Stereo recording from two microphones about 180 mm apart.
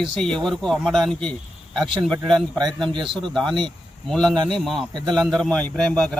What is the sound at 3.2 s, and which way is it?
Speech, 5° left (ahead or behind).